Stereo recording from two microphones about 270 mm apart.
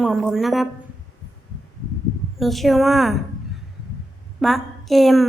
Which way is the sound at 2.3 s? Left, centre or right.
Centre.